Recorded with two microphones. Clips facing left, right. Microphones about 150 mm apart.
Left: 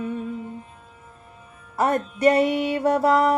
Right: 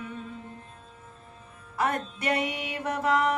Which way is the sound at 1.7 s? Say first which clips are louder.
Left 6 dB; 40° left (ahead or behind).